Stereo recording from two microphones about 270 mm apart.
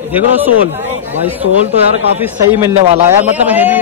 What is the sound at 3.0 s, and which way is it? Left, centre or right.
Speech, centre.